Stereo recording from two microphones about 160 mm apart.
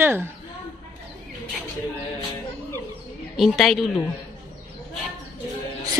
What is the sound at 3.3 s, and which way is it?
Speech, centre (ahead or behind).